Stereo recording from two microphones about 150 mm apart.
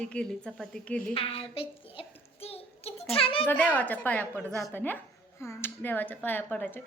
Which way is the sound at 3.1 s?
40° left (ahead or behind).